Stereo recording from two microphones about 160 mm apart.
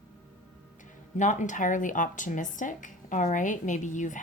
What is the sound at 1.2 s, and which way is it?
Speech, 50° left (ahead or behind).